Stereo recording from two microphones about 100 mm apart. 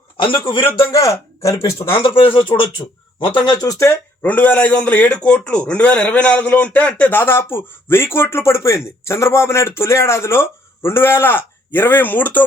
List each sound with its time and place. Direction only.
0.2 s a man's voice: 60° left (ahead or behind)
0.8 s speech: 30° left (ahead or behind)
2.1 s a man's voice: 60° left (ahead or behind); by 3.8 s 40° left (ahead or behind)
3.8 s speech: 20° left (ahead or behind)